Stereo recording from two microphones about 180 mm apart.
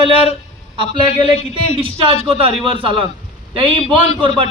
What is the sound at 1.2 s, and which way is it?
A man's voice, 30° right (ahead or behind).